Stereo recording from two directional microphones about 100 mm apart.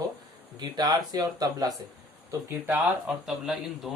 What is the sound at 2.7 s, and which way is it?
Speech, 15° right (ahead or behind).